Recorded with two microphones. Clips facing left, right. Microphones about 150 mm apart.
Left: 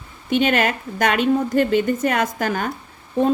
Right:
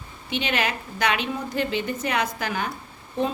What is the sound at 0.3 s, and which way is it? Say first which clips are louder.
A woman's voice: left 8 dB; 50° left (ahead or behind).